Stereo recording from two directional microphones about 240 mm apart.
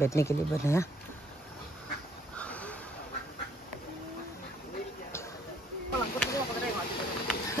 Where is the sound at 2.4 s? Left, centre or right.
Centre.